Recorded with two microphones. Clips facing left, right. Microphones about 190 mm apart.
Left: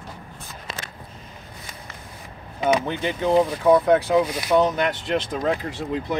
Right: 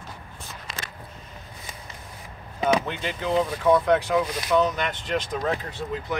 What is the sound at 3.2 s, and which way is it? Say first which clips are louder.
Speech: left 4 dB; 35° left (ahead or behind).